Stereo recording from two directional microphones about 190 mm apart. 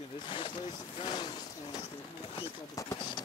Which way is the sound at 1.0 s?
25° left (ahead or behind).